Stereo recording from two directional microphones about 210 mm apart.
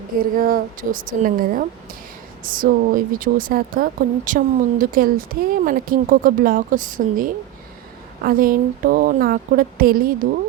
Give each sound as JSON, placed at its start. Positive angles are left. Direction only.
{"t": 0.2, "sound": "speech", "side_deg": -40}